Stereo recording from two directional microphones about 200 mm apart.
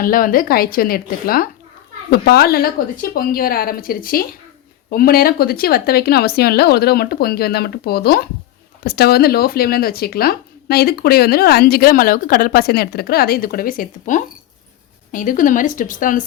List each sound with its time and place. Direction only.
0.0 s speech: 45° left (ahead or behind)